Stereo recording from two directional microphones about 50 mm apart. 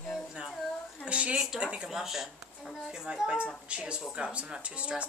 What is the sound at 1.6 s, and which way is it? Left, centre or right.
Speech, right.